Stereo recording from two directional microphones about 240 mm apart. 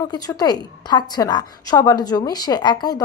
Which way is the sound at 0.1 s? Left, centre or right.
Centre.